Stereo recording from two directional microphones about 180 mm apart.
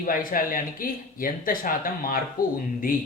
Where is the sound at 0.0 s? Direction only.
50° left (ahead or behind).